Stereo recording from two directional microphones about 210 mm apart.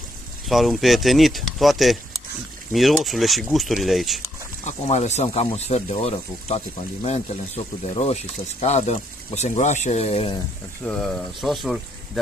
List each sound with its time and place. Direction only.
0.5 s speech: centre (ahead or behind)
4.6 s speech: 35° left (ahead or behind)
10.8 s speech: 5° left (ahead or behind)